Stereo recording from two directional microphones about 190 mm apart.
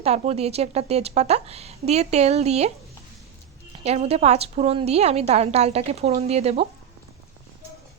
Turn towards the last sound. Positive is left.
turn(degrees=-35)  # may be behind; listen again after turning